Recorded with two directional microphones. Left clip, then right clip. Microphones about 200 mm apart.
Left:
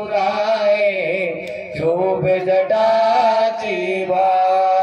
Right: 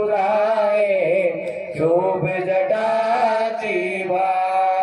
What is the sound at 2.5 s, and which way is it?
Mantra, 35° left (ahead or behind).